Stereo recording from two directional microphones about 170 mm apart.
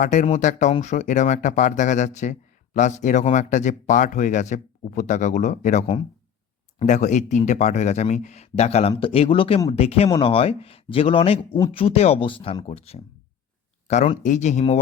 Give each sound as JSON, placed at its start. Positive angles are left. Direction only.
{"t": 0.0, "sound": "speech", "side_deg": 45}